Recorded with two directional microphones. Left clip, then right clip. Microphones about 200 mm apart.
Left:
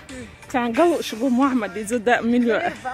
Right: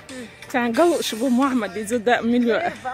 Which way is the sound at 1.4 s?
5° right (ahead or behind).